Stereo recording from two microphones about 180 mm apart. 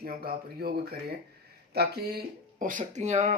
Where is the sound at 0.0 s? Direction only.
55° right (ahead or behind).